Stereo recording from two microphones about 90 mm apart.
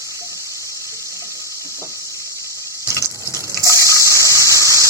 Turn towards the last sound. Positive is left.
turn(degrees=-35)  # may be behind; listen again after turning